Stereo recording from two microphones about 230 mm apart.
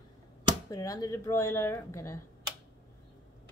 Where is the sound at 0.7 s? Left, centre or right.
Centre.